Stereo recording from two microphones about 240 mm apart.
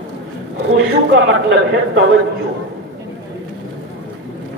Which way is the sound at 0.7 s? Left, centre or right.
Right.